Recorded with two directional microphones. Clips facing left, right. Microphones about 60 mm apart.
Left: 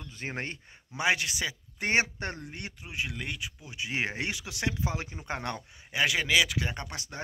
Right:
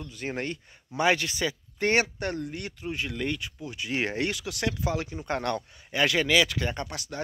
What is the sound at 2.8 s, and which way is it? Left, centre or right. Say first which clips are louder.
Speech: right 5 dB; centre.